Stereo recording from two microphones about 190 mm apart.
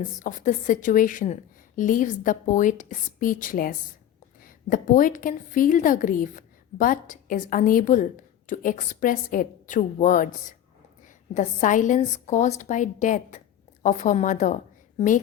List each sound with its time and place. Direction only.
0.2 s a woman's voice: 40° left (ahead or behind)